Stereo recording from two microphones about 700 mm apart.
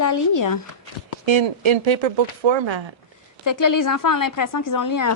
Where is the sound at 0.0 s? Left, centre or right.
Left.